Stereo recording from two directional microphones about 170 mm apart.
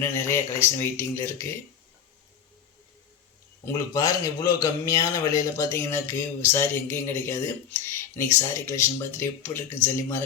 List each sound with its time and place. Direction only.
0.0 s speech: 15° left (ahead or behind)
3.7 s speech: 20° left (ahead or behind)